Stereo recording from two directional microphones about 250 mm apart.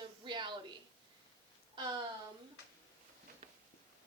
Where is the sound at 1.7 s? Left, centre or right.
Centre.